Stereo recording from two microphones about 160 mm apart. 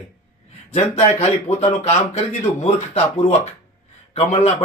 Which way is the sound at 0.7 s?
40° left (ahead or behind).